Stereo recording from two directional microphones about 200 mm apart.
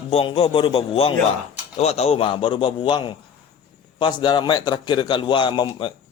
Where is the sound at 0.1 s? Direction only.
30° left (ahead or behind).